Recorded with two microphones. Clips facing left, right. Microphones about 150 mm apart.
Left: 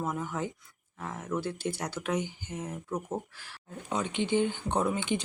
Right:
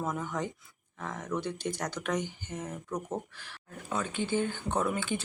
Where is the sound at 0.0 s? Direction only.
10° left (ahead or behind).